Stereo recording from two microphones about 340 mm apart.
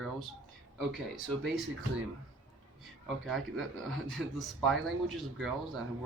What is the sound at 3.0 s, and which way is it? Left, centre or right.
Speech, centre.